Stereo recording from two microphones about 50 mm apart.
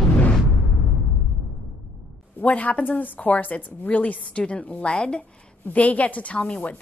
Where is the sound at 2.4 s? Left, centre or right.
Left.